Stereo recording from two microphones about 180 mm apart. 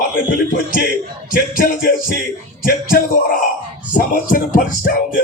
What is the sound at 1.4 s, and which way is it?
Speech, 50° left (ahead or behind).